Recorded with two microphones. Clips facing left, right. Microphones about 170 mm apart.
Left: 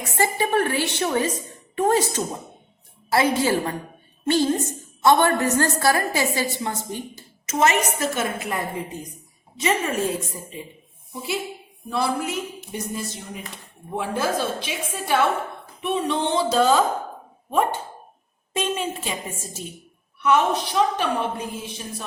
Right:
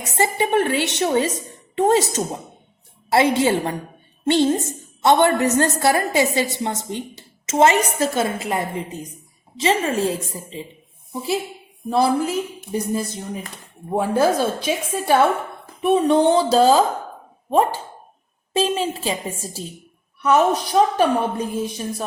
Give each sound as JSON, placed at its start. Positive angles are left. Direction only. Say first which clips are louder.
{"t": 0.0, "sound": "a woman's voice", "louder": "right 2 dB", "side_deg": -20}
{"t": 3.1, "sound": "a woman's voice", "louder": "right 3 dB", "side_deg": -25}